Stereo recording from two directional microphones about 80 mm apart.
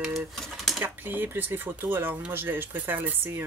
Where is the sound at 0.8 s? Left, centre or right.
Right.